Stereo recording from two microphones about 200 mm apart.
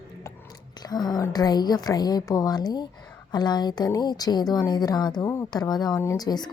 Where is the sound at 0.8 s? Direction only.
20° left (ahead or behind).